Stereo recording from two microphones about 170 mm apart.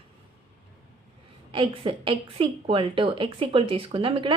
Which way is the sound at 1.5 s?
30° right (ahead or behind).